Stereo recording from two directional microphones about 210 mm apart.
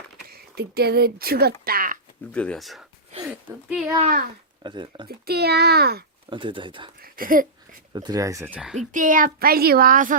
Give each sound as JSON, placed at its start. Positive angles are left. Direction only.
{"t": 0.3, "sound": "speech", "side_deg": -50}
{"t": 1.6, "sound": "a sound", "side_deg": -45}
{"t": 2.3, "sound": "speech", "side_deg": 5}
{"t": 4.0, "sound": "a child's voice", "side_deg": -40}
{"t": 4.6, "sound": "speech", "side_deg": -20}
{"t": 5.0, "sound": "speech", "side_deg": -50}
{"t": 6.3, "sound": "speech", "side_deg": -25}
{"t": 7.0, "sound": "a sound", "side_deg": -40}
{"t": 7.9, "sound": "speech", "side_deg": -20}
{"t": 8.9, "sound": "a child's voice", "side_deg": -40}